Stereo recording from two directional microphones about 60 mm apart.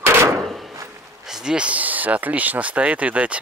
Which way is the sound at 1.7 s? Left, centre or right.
Right.